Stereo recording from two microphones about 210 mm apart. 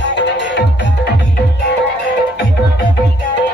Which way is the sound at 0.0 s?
55° left (ahead or behind).